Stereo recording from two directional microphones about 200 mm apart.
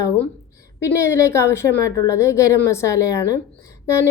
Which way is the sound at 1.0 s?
15° left (ahead or behind).